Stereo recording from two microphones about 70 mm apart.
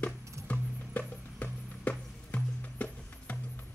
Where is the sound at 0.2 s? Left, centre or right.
Right.